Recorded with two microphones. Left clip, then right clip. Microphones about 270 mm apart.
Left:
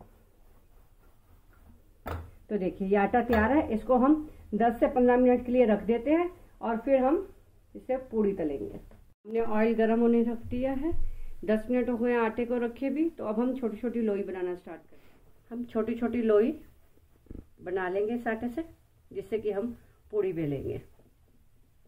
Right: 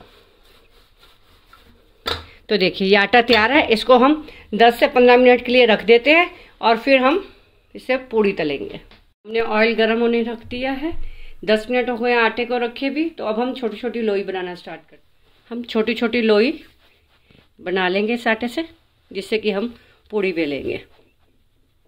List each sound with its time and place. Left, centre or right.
2.4 s a woman's voice: right
15.4 s a woman's voice: right
17.6 s a woman's voice: right
20.1 s a woman's voice: right